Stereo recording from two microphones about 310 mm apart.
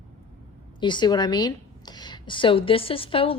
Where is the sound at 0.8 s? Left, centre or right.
Centre.